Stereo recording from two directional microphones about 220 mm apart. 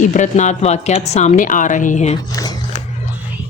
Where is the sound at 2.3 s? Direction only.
15° left (ahead or behind).